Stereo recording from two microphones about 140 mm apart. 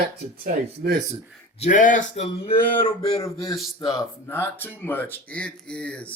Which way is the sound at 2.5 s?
90° left.